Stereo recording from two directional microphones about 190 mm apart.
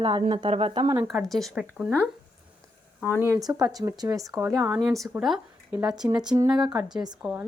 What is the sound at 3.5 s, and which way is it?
Speech, 20° right (ahead or behind).